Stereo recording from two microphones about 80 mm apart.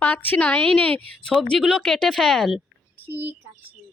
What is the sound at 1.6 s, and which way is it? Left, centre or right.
A woman's voice, centre.